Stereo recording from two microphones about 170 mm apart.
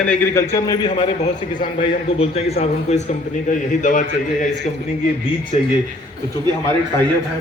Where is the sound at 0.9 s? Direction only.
30° left (ahead or behind); by 4.1 s 45° left (ahead or behind).